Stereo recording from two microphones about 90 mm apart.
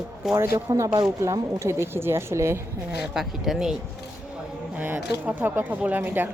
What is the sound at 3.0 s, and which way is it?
Speech, 5° right (ahead or behind).